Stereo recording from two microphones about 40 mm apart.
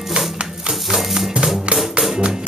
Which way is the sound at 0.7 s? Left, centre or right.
Centre.